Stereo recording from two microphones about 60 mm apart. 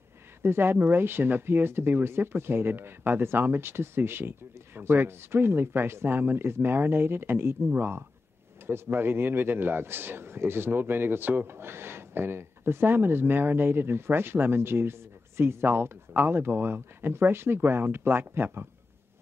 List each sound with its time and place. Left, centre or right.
0.4 s a man's voice: right